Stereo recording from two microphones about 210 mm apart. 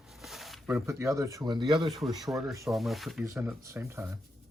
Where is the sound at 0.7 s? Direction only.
15° right (ahead or behind).